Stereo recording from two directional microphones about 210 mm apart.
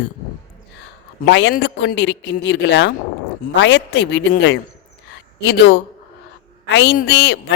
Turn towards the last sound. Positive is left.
turn(degrees=55)  # may be behind; listen again after turning